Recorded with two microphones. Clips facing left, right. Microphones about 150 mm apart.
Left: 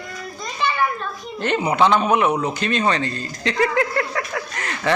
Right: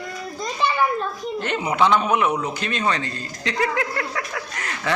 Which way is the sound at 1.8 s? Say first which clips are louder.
Left 1 dB; 20° left (ahead or behind).